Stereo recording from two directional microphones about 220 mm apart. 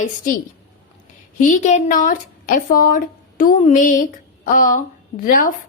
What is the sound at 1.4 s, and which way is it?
A woman's voice, 35° left (ahead or behind).